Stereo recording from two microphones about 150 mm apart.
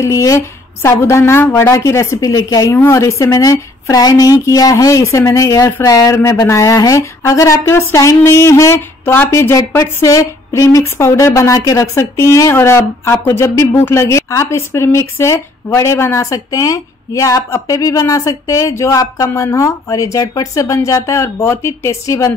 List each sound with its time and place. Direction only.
0.0 s a woman's voice: 20° left (ahead or behind)